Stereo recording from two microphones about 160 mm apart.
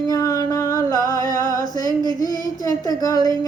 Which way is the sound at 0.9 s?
55° left (ahead or behind).